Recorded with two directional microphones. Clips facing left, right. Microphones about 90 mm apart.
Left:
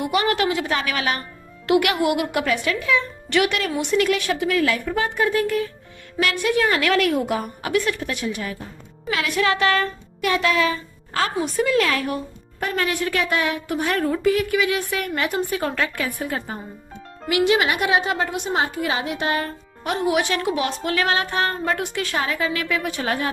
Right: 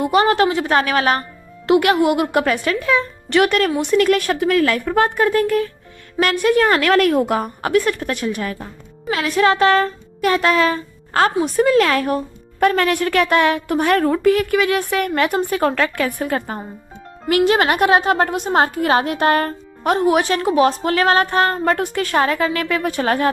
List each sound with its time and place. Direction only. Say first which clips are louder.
0.0 s a woman's voice: right 6 dB; 35° right (ahead or behind)
1.6 s a woman's voice: right 5 dB; 30° right (ahead or behind); by 8.6 s 55° right (ahead or behind)
9.0 s a woman's voice: right 5 dB; 35° right (ahead or behind)
12.5 s a woman's voice: right 8 dB; 60° right (ahead or behind)
17.2 s a woman's voice: right 4 dB; 45° right (ahead or behind)
18.6 s a woman's voice: right 7 dB; 55° right (ahead or behind)